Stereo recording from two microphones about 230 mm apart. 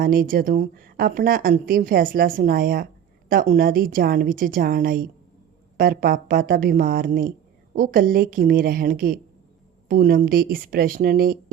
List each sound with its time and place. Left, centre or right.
0.0 s speech: right